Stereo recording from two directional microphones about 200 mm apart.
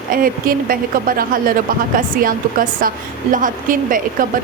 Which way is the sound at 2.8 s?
45° right (ahead or behind).